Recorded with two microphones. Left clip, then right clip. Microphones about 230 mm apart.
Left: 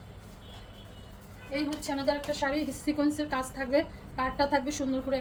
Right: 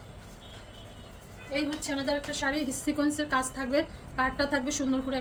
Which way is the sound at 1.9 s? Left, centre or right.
Centre.